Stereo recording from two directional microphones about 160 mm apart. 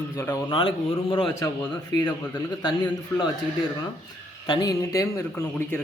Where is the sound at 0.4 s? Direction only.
30° left (ahead or behind).